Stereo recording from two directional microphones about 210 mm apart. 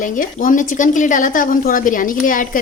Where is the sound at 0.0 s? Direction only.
40° left (ahead or behind).